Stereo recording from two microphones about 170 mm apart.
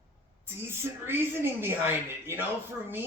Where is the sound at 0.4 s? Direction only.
15° right (ahead or behind).